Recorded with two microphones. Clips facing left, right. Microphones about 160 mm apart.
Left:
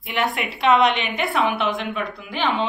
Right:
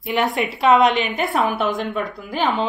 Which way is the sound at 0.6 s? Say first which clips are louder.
Right 2 dB; 40° right (ahead or behind).